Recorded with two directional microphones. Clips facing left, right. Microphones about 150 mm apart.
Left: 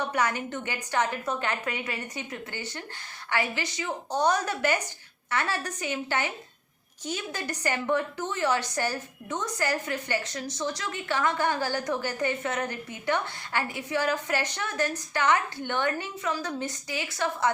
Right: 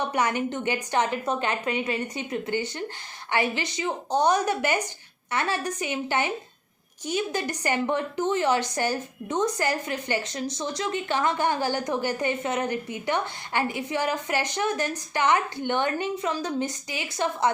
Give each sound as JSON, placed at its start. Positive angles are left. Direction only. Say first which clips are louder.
{"t": 0.1, "sound": "a woman's voice", "louder": "right 3 dB", "side_deg": -20}